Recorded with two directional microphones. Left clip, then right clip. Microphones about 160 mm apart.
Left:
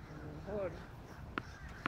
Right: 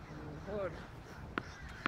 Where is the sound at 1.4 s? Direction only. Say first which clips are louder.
Right 2 dB; 10° left (ahead or behind).